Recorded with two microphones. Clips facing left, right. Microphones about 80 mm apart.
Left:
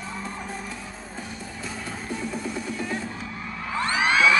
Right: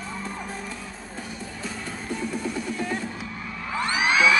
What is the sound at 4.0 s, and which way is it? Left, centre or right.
Music, centre.